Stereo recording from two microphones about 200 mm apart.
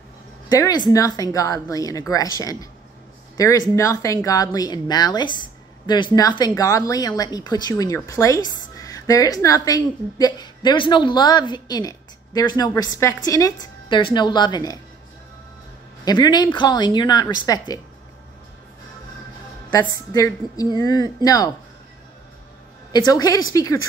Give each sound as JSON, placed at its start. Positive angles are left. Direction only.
{"t": 0.5, "sound": "speech", "side_deg": 20}
{"t": 16.1, "sound": "speech", "side_deg": 20}
{"t": 19.7, "sound": "speech", "side_deg": 20}
{"t": 22.9, "sound": "speech", "side_deg": 20}